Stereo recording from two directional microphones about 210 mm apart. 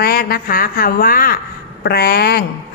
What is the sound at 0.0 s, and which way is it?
A woman's voice, 45° left (ahead or behind).